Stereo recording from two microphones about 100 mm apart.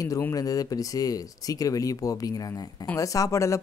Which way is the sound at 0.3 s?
40° left (ahead or behind).